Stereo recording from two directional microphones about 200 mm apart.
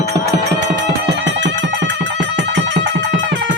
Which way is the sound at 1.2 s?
65° right (ahead or behind).